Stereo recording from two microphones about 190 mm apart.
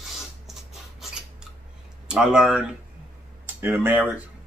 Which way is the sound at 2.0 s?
5° right (ahead or behind).